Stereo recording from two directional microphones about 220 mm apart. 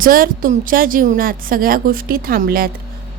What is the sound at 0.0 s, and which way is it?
A woman's voice, 40° right (ahead or behind).